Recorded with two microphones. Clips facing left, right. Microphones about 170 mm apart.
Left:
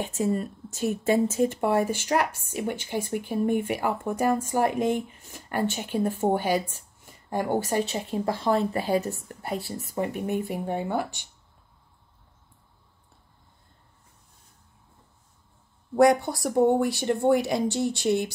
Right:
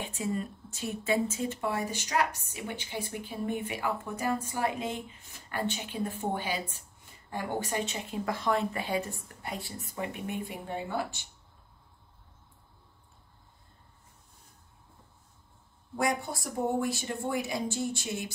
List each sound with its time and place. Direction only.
0.0 s a woman's voice: 40° left (ahead or behind)
16.0 s speech: 70° left (ahead or behind)